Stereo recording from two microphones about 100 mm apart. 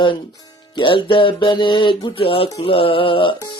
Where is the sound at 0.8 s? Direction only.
55° left (ahead or behind).